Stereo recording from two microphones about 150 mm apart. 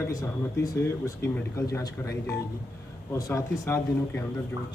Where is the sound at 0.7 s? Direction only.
20° left (ahead or behind).